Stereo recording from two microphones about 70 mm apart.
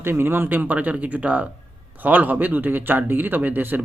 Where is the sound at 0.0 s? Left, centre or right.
Right.